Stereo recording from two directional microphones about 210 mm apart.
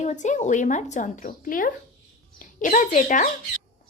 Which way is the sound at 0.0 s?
35° left (ahead or behind).